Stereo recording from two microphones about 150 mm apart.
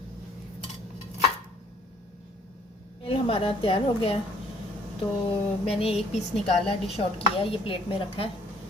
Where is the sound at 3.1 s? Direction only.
40° left (ahead or behind).